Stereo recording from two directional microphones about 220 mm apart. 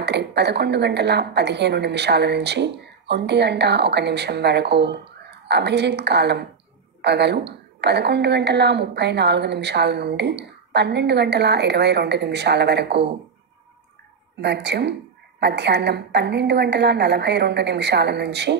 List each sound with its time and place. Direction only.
0.0 s a woman's voice: 50° right (ahead or behind)
14.4 s a woman's voice: 50° right (ahead or behind)